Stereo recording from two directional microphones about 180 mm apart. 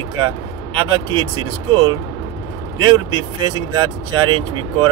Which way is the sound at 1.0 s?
25° right (ahead or behind).